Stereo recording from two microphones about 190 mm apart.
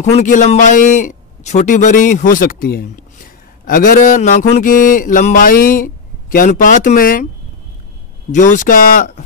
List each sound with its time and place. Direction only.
0.0 s a man's voice: 40° left (ahead or behind)
3.6 s mantra: 45° left (ahead or behind)
8.3 s mantra: 40° left (ahead or behind)